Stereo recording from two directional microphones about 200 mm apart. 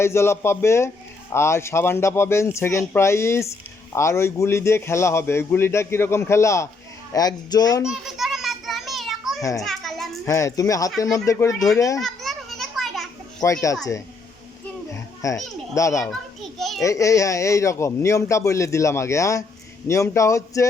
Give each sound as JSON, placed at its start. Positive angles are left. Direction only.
{"t": 0.0, "sound": "a man's voice", "side_deg": 15}
{"t": 7.9, "sound": "children playing", "side_deg": 0}
{"t": 9.4, "sound": "a man's voice", "side_deg": 15}
{"t": 9.6, "sound": "children playing", "side_deg": 0}
{"t": 10.2, "sound": "a man's voice", "side_deg": 15}
{"t": 11.9, "sound": "children playing", "side_deg": 0}
{"t": 13.4, "sound": "a man's voice", "side_deg": 15}
{"t": 15.2, "sound": "a man's voice", "side_deg": 15}
{"t": 16.0, "sound": "children playing", "side_deg": 0}
{"t": 16.8, "sound": "a man's voice", "side_deg": 15}